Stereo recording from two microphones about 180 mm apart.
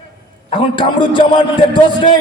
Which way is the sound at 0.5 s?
25° left (ahead or behind).